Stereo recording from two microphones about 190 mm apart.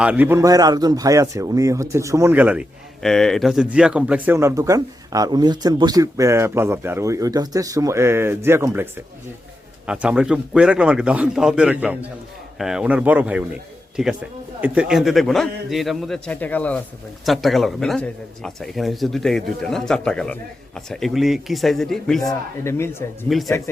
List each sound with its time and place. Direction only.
0.0 s a man's voice: 5° right (ahead or behind)
22.2 s speech: 15° left (ahead or behind)
23.3 s speech: centre (ahead or behind)